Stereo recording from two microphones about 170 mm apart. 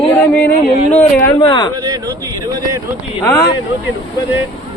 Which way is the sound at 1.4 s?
25° left (ahead or behind).